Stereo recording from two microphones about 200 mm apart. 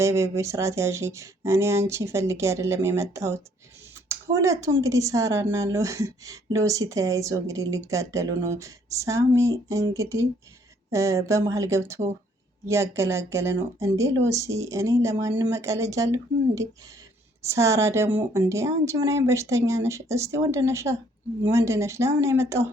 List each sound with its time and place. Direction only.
0.0 s speech: 15° right (ahead or behind)